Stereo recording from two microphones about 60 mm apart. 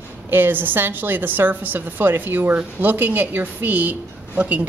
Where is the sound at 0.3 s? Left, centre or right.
Right.